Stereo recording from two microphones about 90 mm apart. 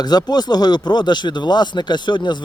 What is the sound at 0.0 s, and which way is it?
A man's voice, 50° left (ahead or behind).